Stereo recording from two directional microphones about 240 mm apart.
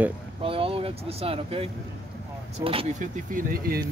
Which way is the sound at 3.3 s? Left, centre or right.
Right.